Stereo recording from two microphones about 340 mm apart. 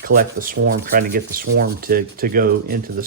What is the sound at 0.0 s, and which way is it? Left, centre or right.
Speech, right.